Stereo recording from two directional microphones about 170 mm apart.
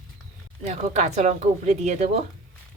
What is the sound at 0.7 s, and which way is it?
Speech, 40° right (ahead or behind).